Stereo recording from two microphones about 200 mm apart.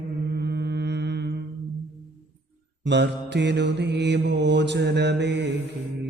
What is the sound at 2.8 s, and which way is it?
Mantra, 60° right (ahead or behind).